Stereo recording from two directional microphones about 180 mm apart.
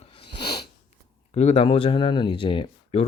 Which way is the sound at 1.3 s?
35° left (ahead or behind).